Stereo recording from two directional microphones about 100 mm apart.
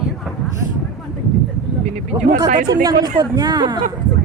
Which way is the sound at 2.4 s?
40° right (ahead or behind).